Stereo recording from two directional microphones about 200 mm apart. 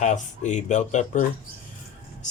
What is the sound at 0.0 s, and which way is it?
Speech, 35° left (ahead or behind).